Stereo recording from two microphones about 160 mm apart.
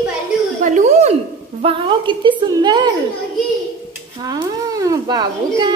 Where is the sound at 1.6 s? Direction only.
35° right (ahead or behind).